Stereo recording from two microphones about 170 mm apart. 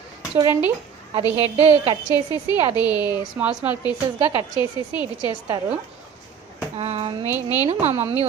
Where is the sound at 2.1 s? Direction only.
25° left (ahead or behind).